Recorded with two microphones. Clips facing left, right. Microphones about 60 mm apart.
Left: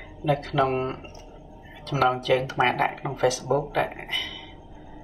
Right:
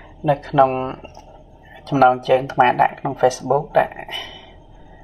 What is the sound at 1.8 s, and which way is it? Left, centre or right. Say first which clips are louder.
Speech: right 8 dB; right.